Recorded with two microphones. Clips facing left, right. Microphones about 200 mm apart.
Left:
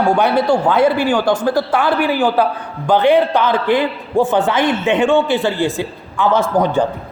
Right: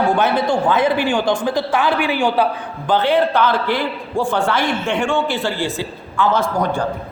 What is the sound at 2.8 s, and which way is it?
A man's voice, 15° left (ahead or behind).